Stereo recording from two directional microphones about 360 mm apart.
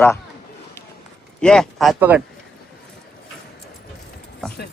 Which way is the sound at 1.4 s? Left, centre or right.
Centre.